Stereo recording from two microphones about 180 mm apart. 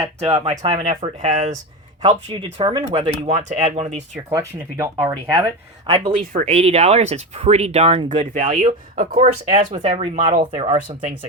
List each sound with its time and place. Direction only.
0.0 s speech: 25° right (ahead or behind)
0.4 s speech: 35° right (ahead or behind)
2.3 s speech: 30° right (ahead or behind)
4.3 s speech: 15° right (ahead or behind)
5.9 s speech: 30° right (ahead or behind)
9.6 s speech: 25° right (ahead or behind)
10.2 s speech: 45° right (ahead or behind)